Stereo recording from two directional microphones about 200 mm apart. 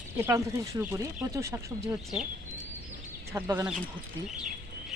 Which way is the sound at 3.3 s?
15° right (ahead or behind).